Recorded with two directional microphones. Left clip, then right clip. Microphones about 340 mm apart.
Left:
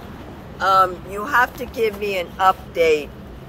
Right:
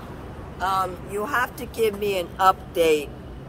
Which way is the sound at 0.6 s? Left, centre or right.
Centre.